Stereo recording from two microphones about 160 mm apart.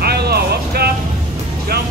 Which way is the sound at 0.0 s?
80° right.